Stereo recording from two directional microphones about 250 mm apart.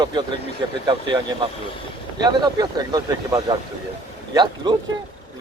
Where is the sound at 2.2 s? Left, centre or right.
Centre.